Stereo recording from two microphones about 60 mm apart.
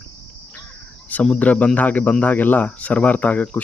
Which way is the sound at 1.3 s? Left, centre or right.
Left.